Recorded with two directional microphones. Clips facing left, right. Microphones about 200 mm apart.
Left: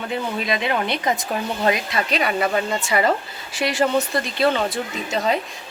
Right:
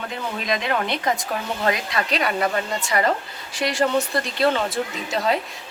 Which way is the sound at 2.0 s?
Centre (ahead or behind).